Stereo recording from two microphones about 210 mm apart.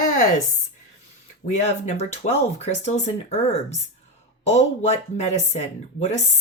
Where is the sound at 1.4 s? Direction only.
35° left (ahead or behind).